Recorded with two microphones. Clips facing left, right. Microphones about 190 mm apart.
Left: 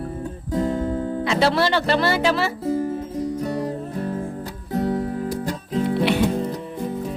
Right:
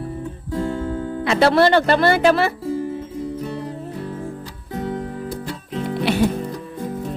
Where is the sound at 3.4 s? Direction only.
45° left (ahead or behind).